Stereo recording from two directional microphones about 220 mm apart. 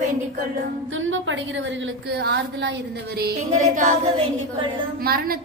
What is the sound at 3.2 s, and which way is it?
Speech, 35° right (ahead or behind).